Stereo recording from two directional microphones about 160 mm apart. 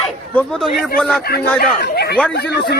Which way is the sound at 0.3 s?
Centre (ahead or behind).